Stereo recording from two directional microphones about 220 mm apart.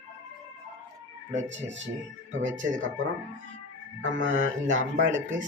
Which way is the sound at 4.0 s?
60° right (ahead or behind).